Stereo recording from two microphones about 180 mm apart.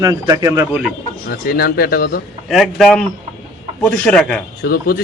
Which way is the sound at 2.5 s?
Centre (ahead or behind).